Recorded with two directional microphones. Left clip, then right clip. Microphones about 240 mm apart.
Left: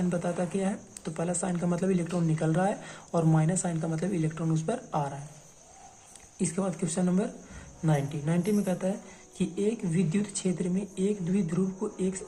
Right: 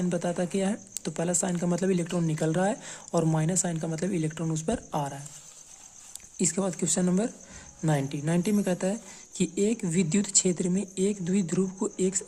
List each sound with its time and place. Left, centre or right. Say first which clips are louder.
0.1 s speech: right 3 dB; right
6.4 s speech: right 3 dB; right